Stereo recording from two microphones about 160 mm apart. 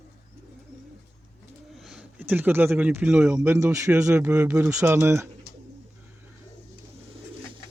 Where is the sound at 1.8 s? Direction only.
10° right (ahead or behind).